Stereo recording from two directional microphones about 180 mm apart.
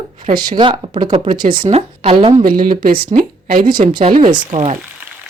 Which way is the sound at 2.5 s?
50° right (ahead or behind).